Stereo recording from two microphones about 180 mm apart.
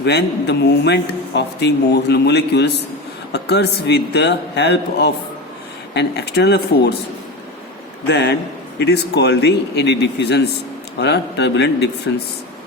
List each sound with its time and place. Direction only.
0.0 s a man's voice: 70° left (ahead or behind)
8.0 s a man's voice: 70° left (ahead or behind)